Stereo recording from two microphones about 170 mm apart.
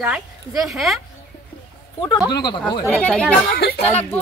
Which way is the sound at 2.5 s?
25° left (ahead or behind).